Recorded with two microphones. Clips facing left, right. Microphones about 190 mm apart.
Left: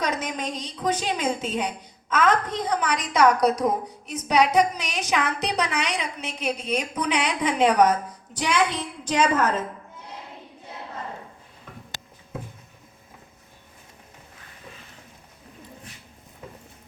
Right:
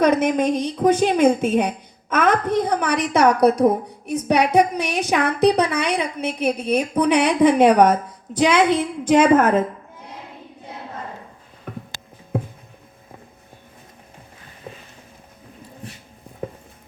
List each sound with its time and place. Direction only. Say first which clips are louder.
0.0 s a woman's voice: right 11 dB; 55° right (ahead or behind)
9.0 s a woman's voice: right 8 dB; 55° right (ahead or behind)
12.3 s a sound: right 10 dB; 55° right (ahead or behind)